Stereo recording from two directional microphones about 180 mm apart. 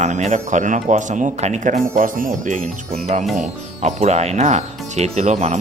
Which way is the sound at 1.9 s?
50° right (ahead or behind).